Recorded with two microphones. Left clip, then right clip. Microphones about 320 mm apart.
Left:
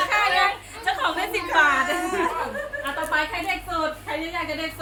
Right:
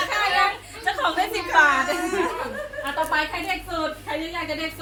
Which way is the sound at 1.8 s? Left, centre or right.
Centre.